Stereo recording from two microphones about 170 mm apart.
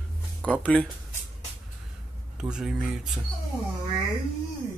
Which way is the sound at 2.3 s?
5° right (ahead or behind).